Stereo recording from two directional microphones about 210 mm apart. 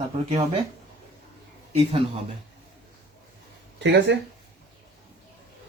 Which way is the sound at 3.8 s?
55° right (ahead or behind).